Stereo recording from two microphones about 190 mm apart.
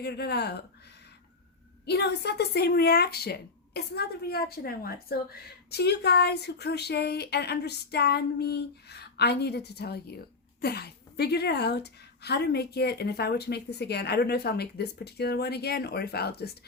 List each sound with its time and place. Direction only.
0.0 s speech: 60° left (ahead or behind)
1.8 s speech: 60° left (ahead or behind)